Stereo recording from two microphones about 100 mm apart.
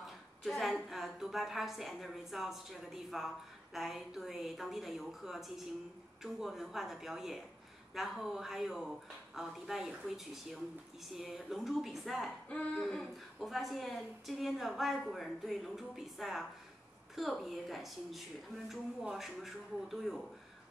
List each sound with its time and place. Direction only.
0.4 s a woman's voice: centre (ahead or behind)